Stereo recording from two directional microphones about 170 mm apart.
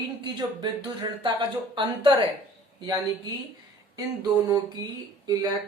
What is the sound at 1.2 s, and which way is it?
Speech, 30° right (ahead or behind).